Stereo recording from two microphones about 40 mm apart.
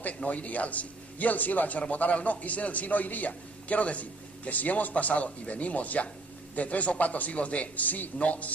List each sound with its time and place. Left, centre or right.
0.2 s a man's voice: left